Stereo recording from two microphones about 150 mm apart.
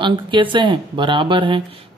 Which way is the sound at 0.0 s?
35° right (ahead or behind).